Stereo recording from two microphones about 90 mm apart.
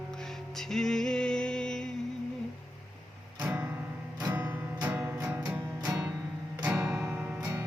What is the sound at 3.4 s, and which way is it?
Music, 20° right (ahead or behind).